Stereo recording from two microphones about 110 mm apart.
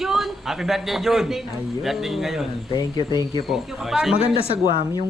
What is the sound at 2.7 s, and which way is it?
Speech, 40° left (ahead or behind).